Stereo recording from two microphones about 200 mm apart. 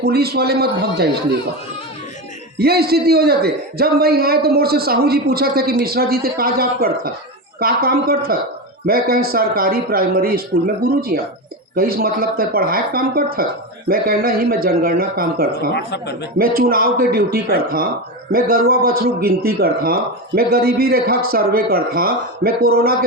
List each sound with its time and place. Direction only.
0.0 s a man's voice: 50° right (ahead or behind)
2.6 s a man's voice: 50° right (ahead or behind)
15.7 s speech: 55° left (ahead or behind)
16.4 s a man's voice: 50° right (ahead or behind)